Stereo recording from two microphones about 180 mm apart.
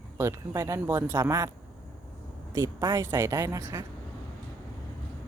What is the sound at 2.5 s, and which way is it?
Speech, 20° right (ahead or behind).